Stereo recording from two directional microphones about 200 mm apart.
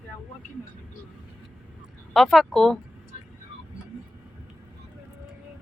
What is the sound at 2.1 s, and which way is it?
Speech, centre (ahead or behind).